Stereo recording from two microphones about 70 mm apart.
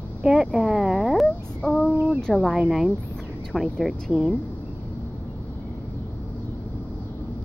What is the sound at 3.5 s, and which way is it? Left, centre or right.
Speech, centre.